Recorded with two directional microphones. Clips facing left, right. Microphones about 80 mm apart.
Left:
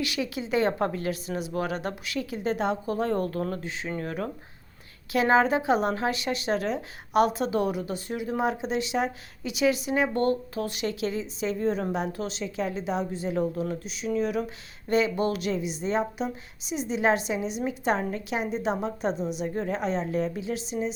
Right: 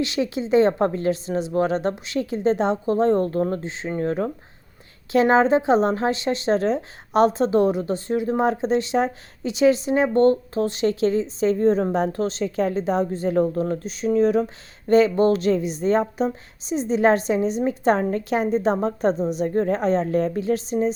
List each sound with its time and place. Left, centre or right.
0.0 s a woman's voice: right